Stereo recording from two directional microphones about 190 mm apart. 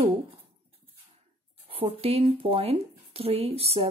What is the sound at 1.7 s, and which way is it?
Speech, 30° right (ahead or behind).